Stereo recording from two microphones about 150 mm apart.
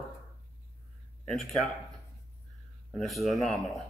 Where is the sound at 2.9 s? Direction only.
Centre (ahead or behind).